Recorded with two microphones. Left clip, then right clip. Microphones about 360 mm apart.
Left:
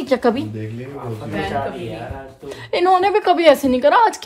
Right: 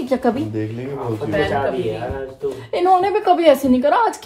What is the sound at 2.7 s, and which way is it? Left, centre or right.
A woman's voice, left.